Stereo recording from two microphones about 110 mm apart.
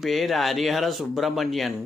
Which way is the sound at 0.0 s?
Centre (ahead or behind).